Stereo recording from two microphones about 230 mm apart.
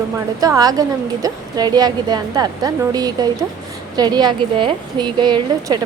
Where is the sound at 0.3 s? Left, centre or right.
Centre.